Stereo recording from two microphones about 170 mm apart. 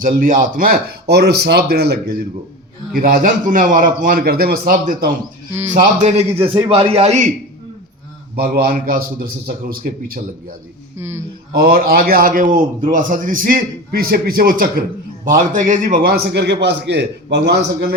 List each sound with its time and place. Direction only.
0.0 s speech: 55° right (ahead or behind); by 2.1 s 70° right (ahead or behind)
2.9 s a man's voice: 60° right (ahead or behind)
5.7 s a man's voice: 45° right (ahead or behind)
8.4 s a man's voice: 60° right (ahead or behind)
10.9 s speech: 15° right (ahead or behind)
11.5 s a man's voice: 60° right (ahead or behind)